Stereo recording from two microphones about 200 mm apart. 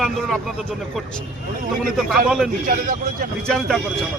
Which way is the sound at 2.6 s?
45° right (ahead or behind).